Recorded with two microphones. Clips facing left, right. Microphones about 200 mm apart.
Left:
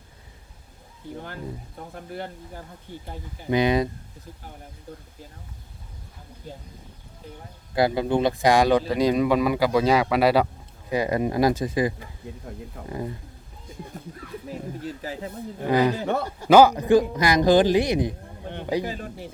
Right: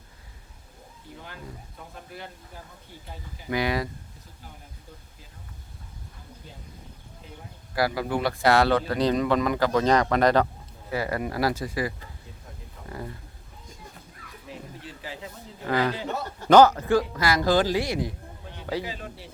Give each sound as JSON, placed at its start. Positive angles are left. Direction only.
{"t": 3.5, "sound": "a man's voice", "side_deg": 20}
{"t": 7.8, "sound": "a man's voice", "side_deg": 25}
{"t": 10.8, "sound": "a man's voice", "side_deg": 20}
{"t": 14.4, "sound": "speech", "side_deg": 40}
{"t": 15.6, "sound": "a man's voice", "side_deg": 15}
{"t": 18.8, "sound": "speech", "side_deg": 45}